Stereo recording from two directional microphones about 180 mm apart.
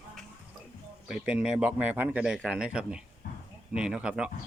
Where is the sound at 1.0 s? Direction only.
5° right (ahead or behind).